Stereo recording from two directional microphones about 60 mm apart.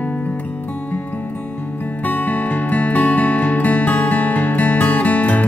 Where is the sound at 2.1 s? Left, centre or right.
Left.